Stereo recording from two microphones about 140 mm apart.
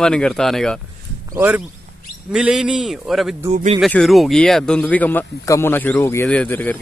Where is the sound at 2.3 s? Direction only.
5° right (ahead or behind).